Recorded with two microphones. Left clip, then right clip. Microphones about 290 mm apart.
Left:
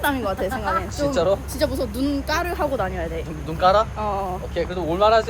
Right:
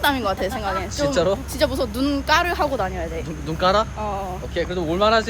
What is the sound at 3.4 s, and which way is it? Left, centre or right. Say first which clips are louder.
Speech: left 2 dB; right.